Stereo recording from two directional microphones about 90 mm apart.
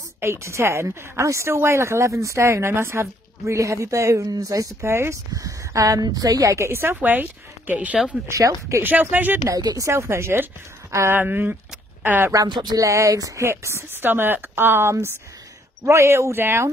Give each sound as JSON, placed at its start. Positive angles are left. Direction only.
{"t": 0.2, "sound": "speech", "side_deg": -30}
{"t": 8.3, "sound": "speech", "side_deg": -35}
{"t": 8.8, "sound": "speech", "side_deg": -20}
{"t": 9.5, "sound": "speech", "side_deg": -45}
{"t": 9.8, "sound": "speech", "side_deg": -30}
{"t": 12.4, "sound": "speech", "side_deg": -60}
{"t": 12.7, "sound": "speech", "side_deg": -35}